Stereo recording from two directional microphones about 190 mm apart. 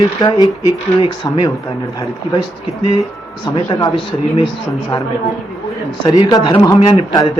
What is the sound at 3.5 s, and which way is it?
Speech, 20° left (ahead or behind).